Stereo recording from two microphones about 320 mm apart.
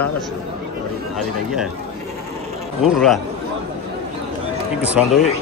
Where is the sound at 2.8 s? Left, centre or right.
Centre.